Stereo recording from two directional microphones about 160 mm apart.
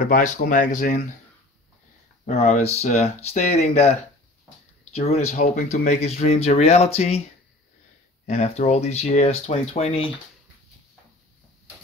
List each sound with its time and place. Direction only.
0.0 s speech: 50° left (ahead or behind)
2.2 s speech: 45° left (ahead or behind)
4.9 s speech: 40° left (ahead or behind)
8.3 s speech: 45° left (ahead or behind)